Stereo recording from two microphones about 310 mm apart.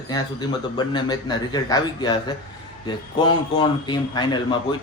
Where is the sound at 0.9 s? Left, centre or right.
Centre.